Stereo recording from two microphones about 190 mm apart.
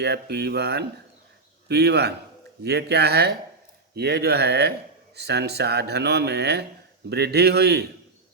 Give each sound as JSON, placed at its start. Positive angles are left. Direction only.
{"t": 0.0, "sound": "speech", "side_deg": -60}